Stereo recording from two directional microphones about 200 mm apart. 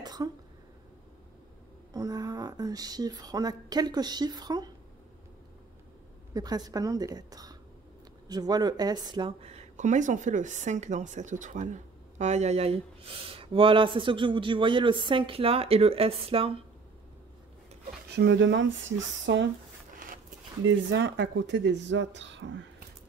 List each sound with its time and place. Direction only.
0.0 s cough: 20° right (ahead or behind)
2.0 s speech: 20° right (ahead or behind)
6.3 s speech: 20° right (ahead or behind)
18.1 s speech: 60° right (ahead or behind)
20.6 s speech: 65° right (ahead or behind)